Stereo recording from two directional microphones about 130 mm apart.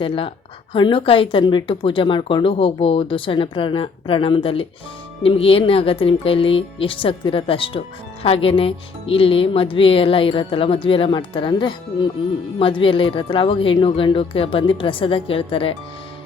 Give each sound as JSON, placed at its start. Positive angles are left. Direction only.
{"t": 0.7, "sound": "speech", "side_deg": 40}